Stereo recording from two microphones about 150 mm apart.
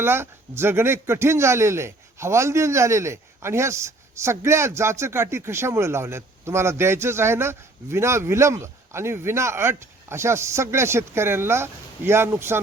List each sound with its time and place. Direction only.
0.0 s speech: 15° right (ahead or behind)